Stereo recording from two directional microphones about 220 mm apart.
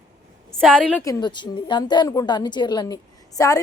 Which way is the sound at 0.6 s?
5° left (ahead or behind).